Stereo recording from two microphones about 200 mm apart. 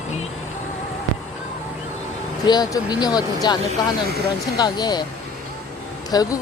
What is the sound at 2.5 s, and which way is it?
Speech, 20° left (ahead or behind).